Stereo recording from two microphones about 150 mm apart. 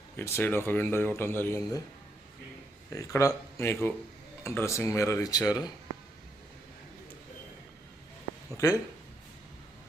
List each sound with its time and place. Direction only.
0.2 s a man's voice: 15° left (ahead or behind)
2.9 s a man's voice: 20° left (ahead or behind)
8.5 s speech: 20° left (ahead or behind)